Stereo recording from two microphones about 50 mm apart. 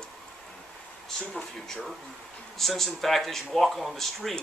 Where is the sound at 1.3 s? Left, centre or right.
Centre.